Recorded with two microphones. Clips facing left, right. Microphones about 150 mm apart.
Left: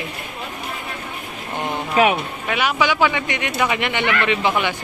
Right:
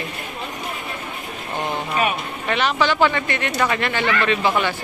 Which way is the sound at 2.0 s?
90° left.